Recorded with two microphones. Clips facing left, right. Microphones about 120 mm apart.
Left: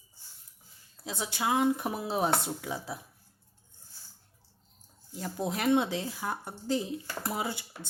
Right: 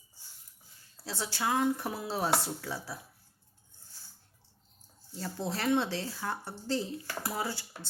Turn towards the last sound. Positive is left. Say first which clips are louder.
# left 1 dB
turn(degrees=20)  # may be behind; listen again after turning